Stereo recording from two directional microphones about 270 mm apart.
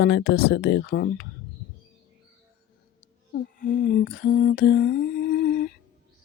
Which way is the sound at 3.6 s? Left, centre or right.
Left.